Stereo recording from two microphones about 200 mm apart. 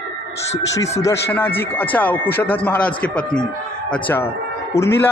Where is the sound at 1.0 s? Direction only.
10° left (ahead or behind).